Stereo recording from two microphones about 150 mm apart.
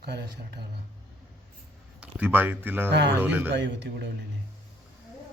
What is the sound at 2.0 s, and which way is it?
Speech, 10° right (ahead or behind).